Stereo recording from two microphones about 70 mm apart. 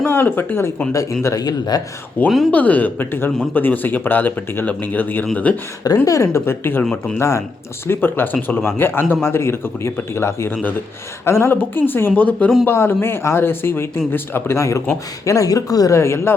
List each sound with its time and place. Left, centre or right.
0.0 s a man's voice: left
0.9 s speech: left
1.5 s speech: left
2.2 s speech: left
6.1 s speech: left
6.4 s a man's voice: left
7.9 s a man's voice: left
12.6 s a man's voice: left
15.2 s speech: left
16.0 s a man's voice: left